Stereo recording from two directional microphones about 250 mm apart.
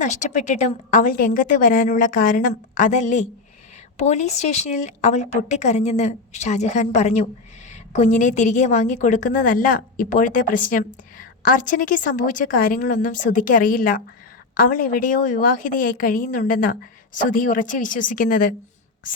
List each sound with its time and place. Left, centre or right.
0.0 s a woman's voice: left